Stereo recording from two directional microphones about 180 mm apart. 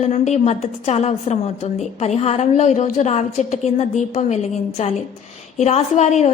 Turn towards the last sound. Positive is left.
turn(degrees=40)  # may be behind; listen again after turning